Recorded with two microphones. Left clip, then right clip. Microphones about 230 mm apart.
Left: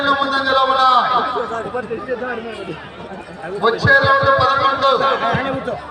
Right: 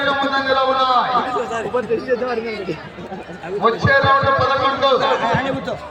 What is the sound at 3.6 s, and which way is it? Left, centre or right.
A man's voice, left.